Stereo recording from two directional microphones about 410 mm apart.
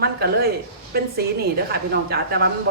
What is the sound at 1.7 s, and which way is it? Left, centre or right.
Speech, right.